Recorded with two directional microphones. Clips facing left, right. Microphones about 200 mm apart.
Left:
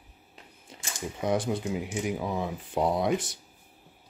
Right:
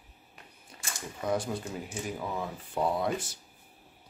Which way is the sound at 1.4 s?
15° left (ahead or behind).